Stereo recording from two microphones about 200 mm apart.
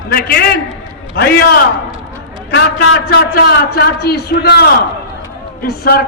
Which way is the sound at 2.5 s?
55° left (ahead or behind).